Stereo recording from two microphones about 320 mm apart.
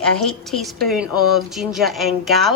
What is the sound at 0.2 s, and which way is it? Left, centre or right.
A woman's voice, centre.